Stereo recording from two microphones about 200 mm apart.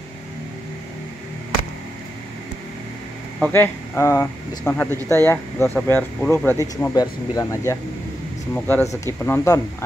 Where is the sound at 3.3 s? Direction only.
5° left (ahead or behind).